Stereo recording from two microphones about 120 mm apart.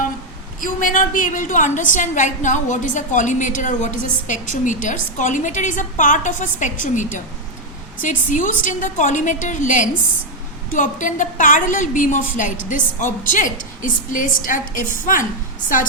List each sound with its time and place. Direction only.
0.6 s a woman's voice: 90° left